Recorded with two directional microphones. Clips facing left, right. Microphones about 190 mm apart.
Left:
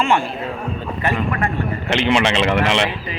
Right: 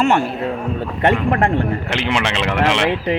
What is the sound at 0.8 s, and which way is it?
Speech, 80° right.